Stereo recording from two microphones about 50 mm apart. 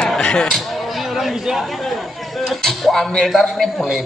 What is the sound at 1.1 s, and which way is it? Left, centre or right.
A man's voice, centre.